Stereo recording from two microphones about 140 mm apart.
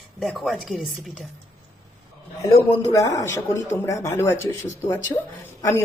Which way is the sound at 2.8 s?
25° left (ahead or behind).